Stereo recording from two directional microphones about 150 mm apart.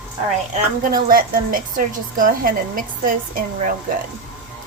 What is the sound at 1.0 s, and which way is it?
A woman's voice, 70° right (ahead or behind).